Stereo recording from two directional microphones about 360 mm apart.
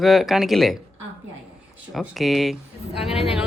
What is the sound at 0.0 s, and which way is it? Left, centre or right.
Speech, centre.